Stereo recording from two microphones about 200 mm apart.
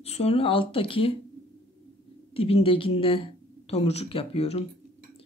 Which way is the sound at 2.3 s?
30° left (ahead or behind).